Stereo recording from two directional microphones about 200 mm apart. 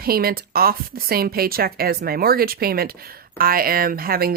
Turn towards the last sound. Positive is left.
turn(degrees=-50)  # may be behind; listen again after turning